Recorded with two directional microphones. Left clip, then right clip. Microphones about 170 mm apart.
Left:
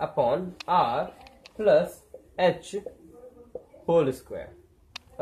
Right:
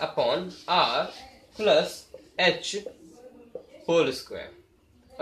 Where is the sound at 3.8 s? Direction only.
45° left (ahead or behind).